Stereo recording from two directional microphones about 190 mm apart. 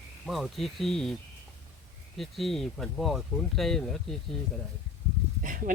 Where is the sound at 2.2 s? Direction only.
Centre (ahead or behind).